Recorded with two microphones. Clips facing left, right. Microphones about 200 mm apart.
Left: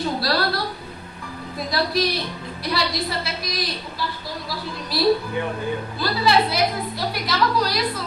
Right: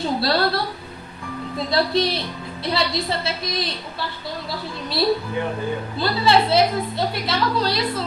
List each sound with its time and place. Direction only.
0.2 s a woman's voice: 25° right (ahead or behind)